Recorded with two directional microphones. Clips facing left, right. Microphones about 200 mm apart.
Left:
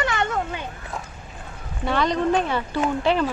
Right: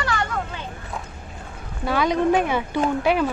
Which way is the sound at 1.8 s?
5° right (ahead or behind).